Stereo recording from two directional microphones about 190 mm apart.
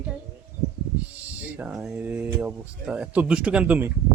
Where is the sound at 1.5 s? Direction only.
10° right (ahead or behind).